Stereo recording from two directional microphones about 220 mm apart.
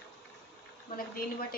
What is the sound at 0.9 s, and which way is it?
Speech, 40° left (ahead or behind).